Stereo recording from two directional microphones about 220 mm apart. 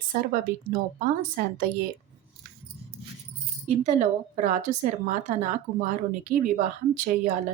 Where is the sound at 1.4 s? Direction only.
45° right (ahead or behind).